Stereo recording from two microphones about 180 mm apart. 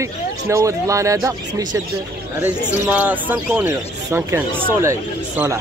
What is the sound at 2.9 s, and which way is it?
Speech, 10° right (ahead or behind).